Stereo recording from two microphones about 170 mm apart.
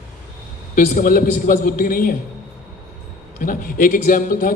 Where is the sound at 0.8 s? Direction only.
50° left (ahead or behind).